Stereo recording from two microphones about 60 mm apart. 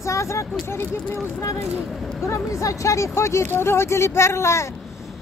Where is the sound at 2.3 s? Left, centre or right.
Left.